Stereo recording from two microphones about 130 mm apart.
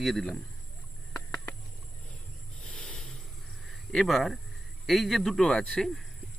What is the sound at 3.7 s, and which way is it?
A man's voice, 5° left (ahead or behind).